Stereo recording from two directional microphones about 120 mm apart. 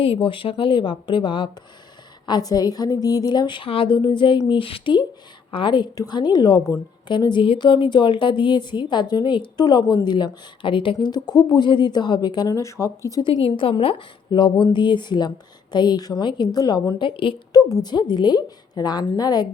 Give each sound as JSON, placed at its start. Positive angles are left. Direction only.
{"t": 0.0, "sound": "a woman's voice", "side_deg": 45}
{"t": 13.2, "sound": "a woman's voice", "side_deg": 45}
{"t": 17.5, "sound": "a woman's voice", "side_deg": 30}